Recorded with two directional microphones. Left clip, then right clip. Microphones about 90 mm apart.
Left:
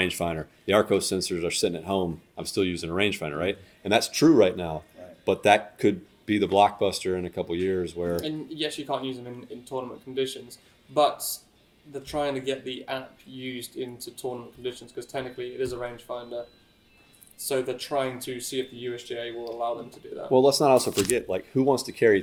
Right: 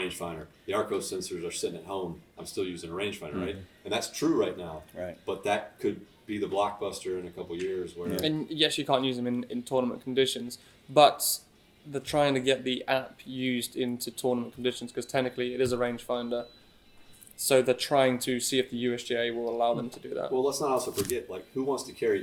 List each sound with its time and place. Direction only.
0.0 s speech: 50° left (ahead or behind)
8.1 s speech: 25° right (ahead or behind)
17.4 s speech: 25° right (ahead or behind)
20.3 s speech: 50° left (ahead or behind)
20.9 s speech: 30° left (ahead or behind)
21.2 s speech: 45° left (ahead or behind)